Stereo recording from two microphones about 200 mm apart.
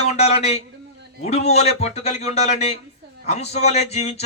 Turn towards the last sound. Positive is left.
turn(degrees=30)  # may be behind; listen again after turning